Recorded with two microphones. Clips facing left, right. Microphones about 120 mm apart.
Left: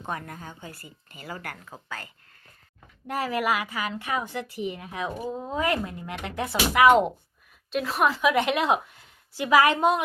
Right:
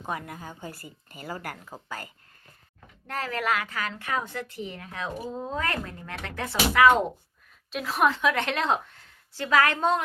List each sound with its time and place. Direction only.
0.0 s speech: 10° right (ahead or behind)
0.7 s speech: 45° right (ahead or behind)
1.4 s speech: 10° right (ahead or behind)
3.1 s a woman's voice: 10° left (ahead or behind)
7.7 s a woman's voice: centre (ahead or behind)